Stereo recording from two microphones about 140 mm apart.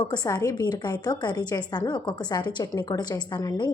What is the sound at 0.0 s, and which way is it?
A woman's voice, 30° left (ahead or behind).